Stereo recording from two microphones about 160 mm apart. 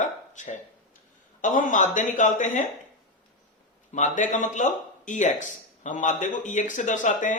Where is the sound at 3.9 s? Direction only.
50° left (ahead or behind).